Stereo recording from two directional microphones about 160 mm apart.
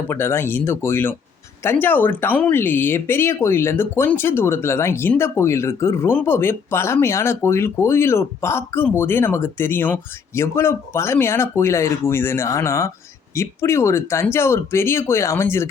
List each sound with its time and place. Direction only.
0.1 s speech: 15° left (ahead or behind)